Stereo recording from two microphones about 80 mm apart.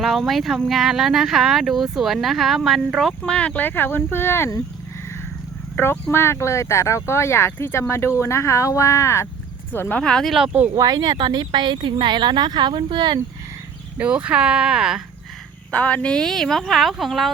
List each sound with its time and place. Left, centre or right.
0.0 s speech: centre
3.2 s speech: centre; by 4.6 s left
5.7 s speech: left
9.9 s speech: centre
10.8 s speech: right
14.0 s speech: centre
15.7 s speech: centre